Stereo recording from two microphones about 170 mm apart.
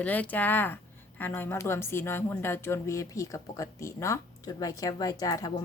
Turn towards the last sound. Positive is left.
turn(degrees=20)  # may be behind; listen again after turning